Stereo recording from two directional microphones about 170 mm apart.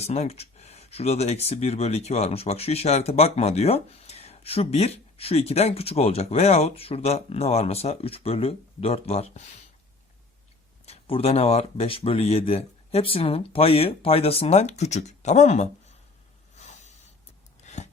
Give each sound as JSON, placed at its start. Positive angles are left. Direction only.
{"t": 0.0, "sound": "speech", "side_deg": 40}
{"t": 10.8, "sound": "speech", "side_deg": 35}
{"t": 16.6, "sound": "a sound", "side_deg": 45}